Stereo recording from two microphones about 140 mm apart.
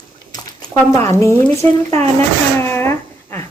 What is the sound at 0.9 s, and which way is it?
A woman's voice, 20° left (ahead or behind).